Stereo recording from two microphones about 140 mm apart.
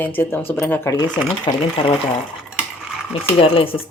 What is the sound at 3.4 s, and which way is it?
Speech, 40° left (ahead or behind).